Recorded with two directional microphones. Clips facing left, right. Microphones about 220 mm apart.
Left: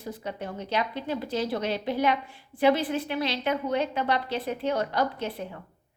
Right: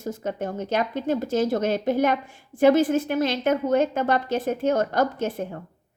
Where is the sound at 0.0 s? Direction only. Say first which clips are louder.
Right 6 dB; 45° right (ahead or behind).